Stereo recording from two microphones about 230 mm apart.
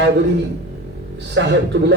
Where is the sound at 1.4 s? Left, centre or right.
Right.